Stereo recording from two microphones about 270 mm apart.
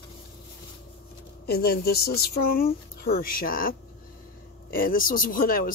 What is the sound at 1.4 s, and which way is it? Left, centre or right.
Speech, left.